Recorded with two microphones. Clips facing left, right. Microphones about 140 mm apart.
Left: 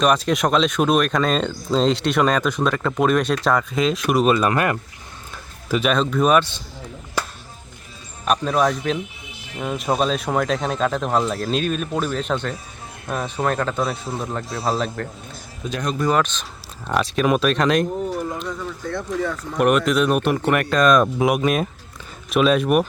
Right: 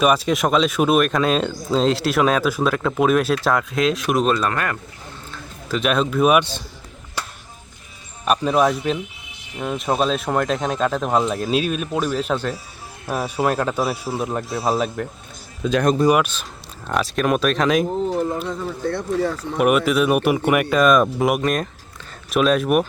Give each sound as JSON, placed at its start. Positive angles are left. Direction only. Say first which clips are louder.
{"t": 0.0, "sound": "speech", "louder": "right 1 dB", "side_deg": -5}
{"t": 5.3, "sound": "tick-tock", "louder": "left 2 dB", "side_deg": 10}
{"t": 5.8, "sound": "speech", "louder": "right 2 dB", "side_deg": -5}
{"t": 8.2, "sound": "speech", "louder": "right 2 dB", "side_deg": -5}
{"t": 11.3, "sound": "speech", "louder": "right 1 dB", "side_deg": -15}
{"t": 16.0, "sound": "speech", "louder": "right 3 dB", "side_deg": -10}
{"t": 18.1, "sound": "speech", "louder": "right 4 dB", "side_deg": -25}
{"t": 19.4, "sound": "speech", "louder": "left 2 dB", "side_deg": -5}